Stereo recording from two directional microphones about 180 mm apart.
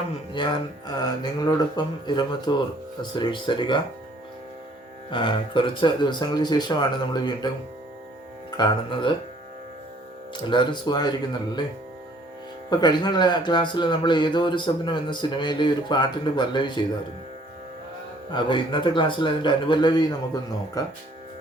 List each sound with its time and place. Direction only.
0.3 s speech: 25° left (ahead or behind)
5.1 s speech: 25° left (ahead or behind)
10.5 s speech: 25° left (ahead or behind)
12.7 s speech: 25° left (ahead or behind)
18.3 s speech: 25° left (ahead or behind)